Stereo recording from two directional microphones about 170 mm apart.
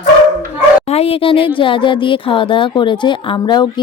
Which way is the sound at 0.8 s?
35° left (ahead or behind).